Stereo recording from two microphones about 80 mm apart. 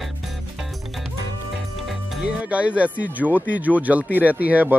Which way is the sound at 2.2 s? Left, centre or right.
Centre.